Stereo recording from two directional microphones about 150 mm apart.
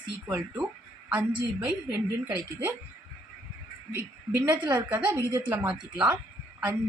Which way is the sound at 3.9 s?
15° right (ahead or behind).